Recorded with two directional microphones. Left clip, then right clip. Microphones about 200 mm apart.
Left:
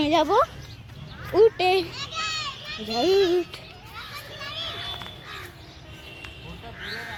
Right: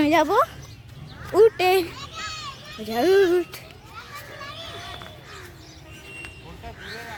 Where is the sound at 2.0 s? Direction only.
40° left (ahead or behind).